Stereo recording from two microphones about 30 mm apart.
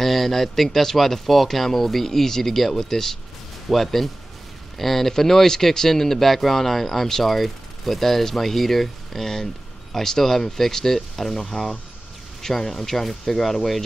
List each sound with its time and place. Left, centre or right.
0.0 s speech: centre
11.6 s speech: left
12.4 s speech: centre